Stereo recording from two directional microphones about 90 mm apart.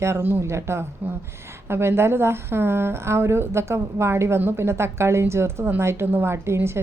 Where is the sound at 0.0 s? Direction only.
25° right (ahead or behind).